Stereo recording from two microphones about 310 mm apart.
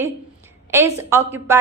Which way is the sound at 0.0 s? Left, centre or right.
Centre.